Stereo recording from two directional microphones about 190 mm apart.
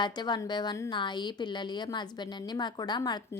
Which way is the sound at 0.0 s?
20° left (ahead or behind).